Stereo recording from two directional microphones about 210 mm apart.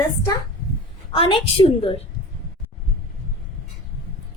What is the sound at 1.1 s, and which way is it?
Speech, 25° left (ahead or behind).